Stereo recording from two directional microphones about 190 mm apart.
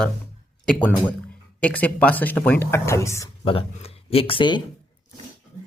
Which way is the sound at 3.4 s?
30° left (ahead or behind).